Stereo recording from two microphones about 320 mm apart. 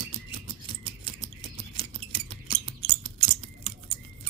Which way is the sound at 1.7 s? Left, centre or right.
Centre.